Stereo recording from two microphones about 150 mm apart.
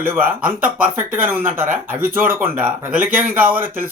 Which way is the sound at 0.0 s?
15° right (ahead or behind).